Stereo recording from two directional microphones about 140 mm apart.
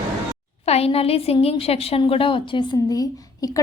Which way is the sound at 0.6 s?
45° left (ahead or behind).